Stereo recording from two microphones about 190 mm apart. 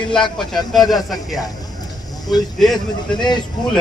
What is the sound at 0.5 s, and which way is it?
Speech, centre (ahead or behind).